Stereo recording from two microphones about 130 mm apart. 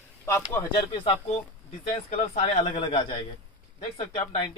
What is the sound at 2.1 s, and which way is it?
Speech, 55° left (ahead or behind).